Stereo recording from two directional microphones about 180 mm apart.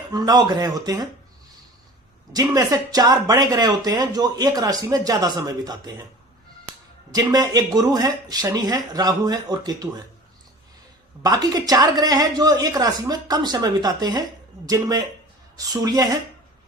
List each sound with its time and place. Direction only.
0.1 s speech: 20° right (ahead or behind)
2.3 s speech: 20° right (ahead or behind)
11.2 s speech: 20° right (ahead or behind)